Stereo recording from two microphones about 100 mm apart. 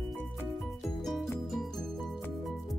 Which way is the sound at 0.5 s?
5° left (ahead or behind).